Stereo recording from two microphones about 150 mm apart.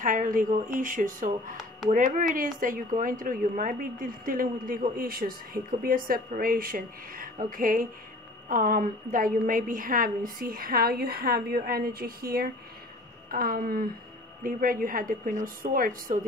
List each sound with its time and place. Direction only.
0.0 s a woman's voice: 60° right (ahead or behind)